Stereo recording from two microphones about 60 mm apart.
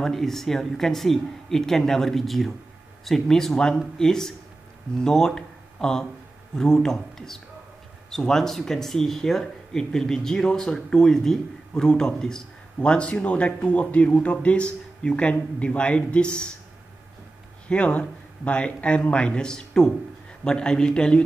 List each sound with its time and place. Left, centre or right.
0.0 s speech: centre
17.6 s speech: centre